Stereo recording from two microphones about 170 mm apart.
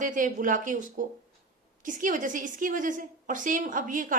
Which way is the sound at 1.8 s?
50° right (ahead or behind).